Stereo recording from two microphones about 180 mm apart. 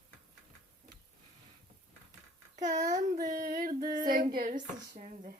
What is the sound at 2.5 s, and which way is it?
Speech, 45° right (ahead or behind).